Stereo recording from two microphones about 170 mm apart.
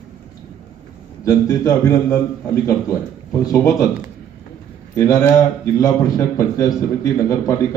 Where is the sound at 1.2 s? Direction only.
20° left (ahead or behind).